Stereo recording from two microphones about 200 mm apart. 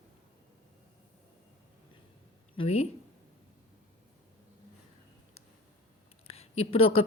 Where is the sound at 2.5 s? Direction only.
30° left (ahead or behind).